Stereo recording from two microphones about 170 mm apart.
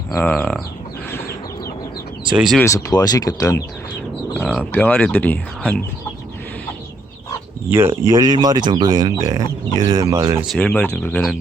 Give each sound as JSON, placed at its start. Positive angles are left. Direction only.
{"t": 0.1, "sound": "speech", "side_deg": 10}
{"t": 2.3, "sound": "speech", "side_deg": -5}
{"t": 2.6, "sound": "speech", "side_deg": 20}
{"t": 7.7, "sound": "speech", "side_deg": -15}
{"t": 10.4, "sound": "speech", "side_deg": 5}